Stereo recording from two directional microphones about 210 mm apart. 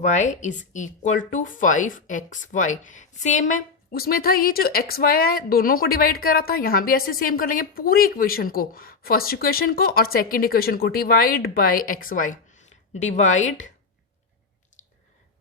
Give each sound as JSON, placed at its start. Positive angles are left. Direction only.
{"t": 0.0, "sound": "speech", "side_deg": 35}